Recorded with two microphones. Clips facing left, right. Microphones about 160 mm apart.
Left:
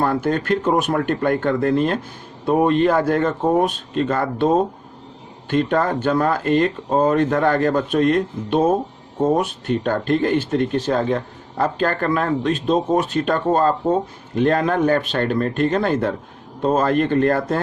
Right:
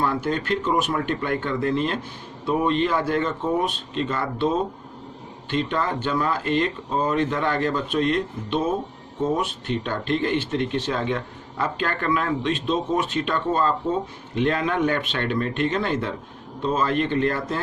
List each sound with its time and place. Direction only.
0.0 s speech: 50° left (ahead or behind)